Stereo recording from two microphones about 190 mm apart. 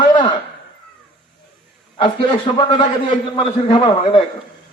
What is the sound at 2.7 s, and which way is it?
A man's voice, 25° left (ahead or behind).